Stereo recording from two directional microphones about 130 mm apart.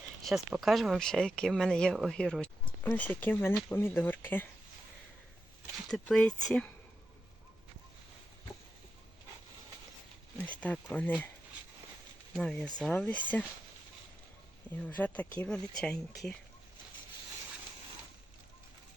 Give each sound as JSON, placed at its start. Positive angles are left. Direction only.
{"t": 0.3, "sound": "speech", "side_deg": 0}
{"t": 5.9, "sound": "speech", "side_deg": 5}
{"t": 10.5, "sound": "speech", "side_deg": 10}
{"t": 12.3, "sound": "speech", "side_deg": 5}
{"t": 14.8, "sound": "speech", "side_deg": 15}